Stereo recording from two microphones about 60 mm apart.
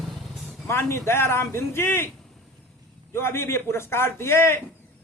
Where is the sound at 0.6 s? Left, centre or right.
Left.